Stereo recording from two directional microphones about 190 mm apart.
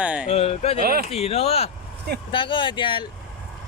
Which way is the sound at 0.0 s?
5° right (ahead or behind).